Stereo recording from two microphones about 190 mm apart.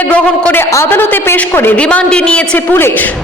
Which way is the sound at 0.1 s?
10° left (ahead or behind).